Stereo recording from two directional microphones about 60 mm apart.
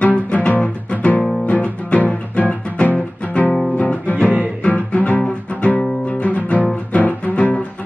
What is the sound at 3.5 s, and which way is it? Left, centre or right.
Guitar, centre.